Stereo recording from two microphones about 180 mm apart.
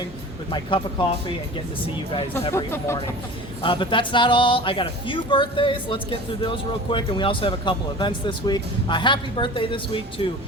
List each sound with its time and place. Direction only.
0.5 s speech: 25° left (ahead or behind)
2.5 s speech: 15° left (ahead or behind)
3.6 s speech: 30° left (ahead or behind)